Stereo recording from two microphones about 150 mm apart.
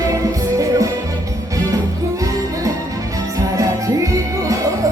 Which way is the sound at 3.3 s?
20° right (ahead or behind).